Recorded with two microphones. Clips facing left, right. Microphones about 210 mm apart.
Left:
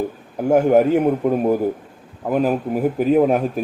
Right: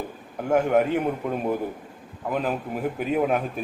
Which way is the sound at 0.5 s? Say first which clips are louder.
Left 6 dB; 35° left (ahead or behind).